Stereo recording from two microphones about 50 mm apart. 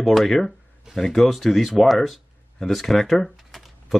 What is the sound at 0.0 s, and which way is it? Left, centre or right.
Speech, centre.